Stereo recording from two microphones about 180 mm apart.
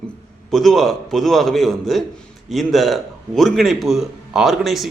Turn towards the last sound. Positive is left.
turn(degrees=0)  # may be behind; listen again after turning